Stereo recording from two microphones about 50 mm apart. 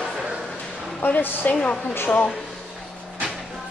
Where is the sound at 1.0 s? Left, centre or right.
Left.